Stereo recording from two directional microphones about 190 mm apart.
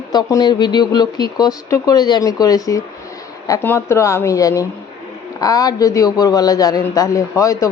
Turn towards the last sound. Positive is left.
turn(degrees=15)  # may be behind; listen again after turning